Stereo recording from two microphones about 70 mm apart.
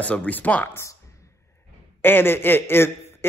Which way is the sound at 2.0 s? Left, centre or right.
Left.